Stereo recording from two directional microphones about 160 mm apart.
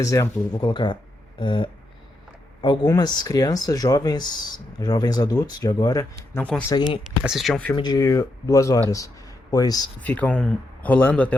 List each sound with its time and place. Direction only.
0.0 s speech: 20° left (ahead or behind)
2.8 s speech: 20° left (ahead or behind)
7.3 s speech: centre (ahead or behind)
7.8 s speech: 25° left (ahead or behind)
10.0 s speech: 10° left (ahead or behind)